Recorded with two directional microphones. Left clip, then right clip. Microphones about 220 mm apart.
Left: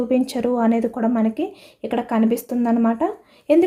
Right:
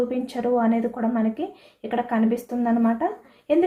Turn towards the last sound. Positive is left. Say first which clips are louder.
# left 5 dB
turn(degrees=55)  # may be behind; listen again after turning